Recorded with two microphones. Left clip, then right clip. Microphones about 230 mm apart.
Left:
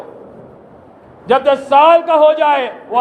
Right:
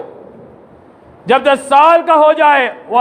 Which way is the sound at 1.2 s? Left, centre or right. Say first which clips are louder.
Right 1 dB; right.